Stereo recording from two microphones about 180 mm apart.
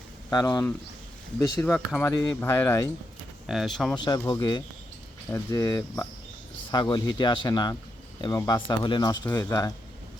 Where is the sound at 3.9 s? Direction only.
25° left (ahead or behind).